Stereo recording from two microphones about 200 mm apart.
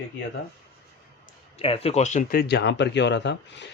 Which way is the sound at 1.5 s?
30° left (ahead or behind).